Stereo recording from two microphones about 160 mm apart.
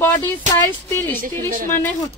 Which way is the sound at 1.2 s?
55° right (ahead or behind).